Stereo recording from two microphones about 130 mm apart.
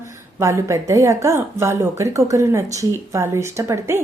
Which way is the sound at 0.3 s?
20° right (ahead or behind).